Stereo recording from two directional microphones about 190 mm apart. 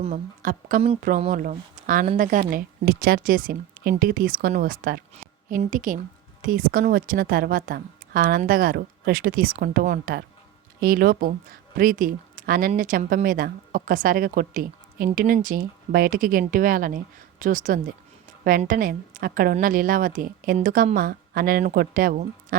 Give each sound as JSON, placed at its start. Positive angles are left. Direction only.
{"t": 0.0, "sound": "a woman's voice", "side_deg": -40}
{"t": 2.4, "sound": "speech", "side_deg": -55}